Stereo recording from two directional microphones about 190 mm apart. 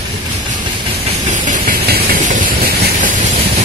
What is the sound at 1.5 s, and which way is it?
Steam, 50° right (ahead or behind).